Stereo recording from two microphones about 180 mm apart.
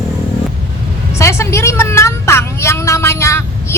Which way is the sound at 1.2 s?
15° left (ahead or behind).